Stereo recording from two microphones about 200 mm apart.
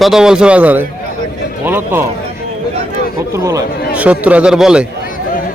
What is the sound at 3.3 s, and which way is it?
A man's voice, 15° right (ahead or behind).